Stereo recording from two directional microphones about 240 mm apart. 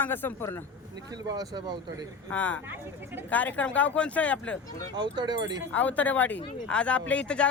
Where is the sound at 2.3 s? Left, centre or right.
Centre.